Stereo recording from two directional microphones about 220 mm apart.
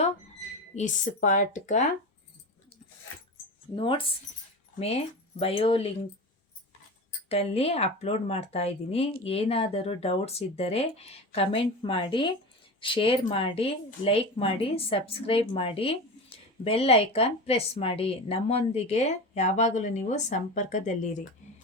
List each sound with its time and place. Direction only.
0.8 s speech: 35° left (ahead or behind)
3.8 s a woman's voice: 25° left (ahead or behind)
7.3 s a woman's voice: 25° left (ahead or behind)